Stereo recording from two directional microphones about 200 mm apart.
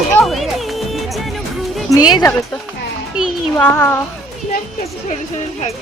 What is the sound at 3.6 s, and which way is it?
Speech, 10° left (ahead or behind).